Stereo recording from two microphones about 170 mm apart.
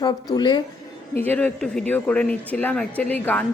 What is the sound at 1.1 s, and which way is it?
A woman's voice, 10° left (ahead or behind).